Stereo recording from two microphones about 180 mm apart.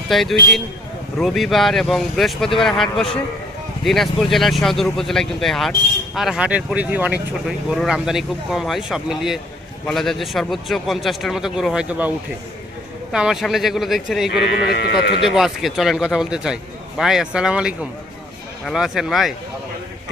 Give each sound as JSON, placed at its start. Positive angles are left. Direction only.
{"t": 0.1, "sound": "speech", "side_deg": 0}
{"t": 14.3, "sound": "speech", "side_deg": 65}
{"t": 15.2, "sound": "speech", "side_deg": 0}